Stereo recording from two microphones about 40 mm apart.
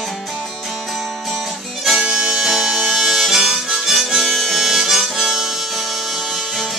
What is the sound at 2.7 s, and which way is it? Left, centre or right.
Harmonica, centre.